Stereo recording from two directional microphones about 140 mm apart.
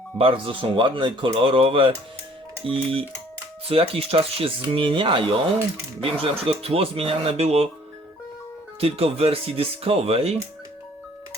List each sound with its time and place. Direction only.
0.2 s speech: 40° right (ahead or behind)
8.8 s speech: 45° right (ahead or behind)